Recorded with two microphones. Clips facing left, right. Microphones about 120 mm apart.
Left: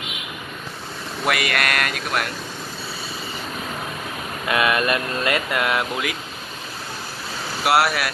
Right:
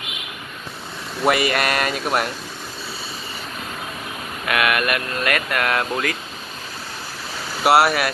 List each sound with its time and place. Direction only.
1.2 s speech: 30° right (ahead or behind)
4.5 s speech: 25° left (ahead or behind)
7.6 s speech: centre (ahead or behind)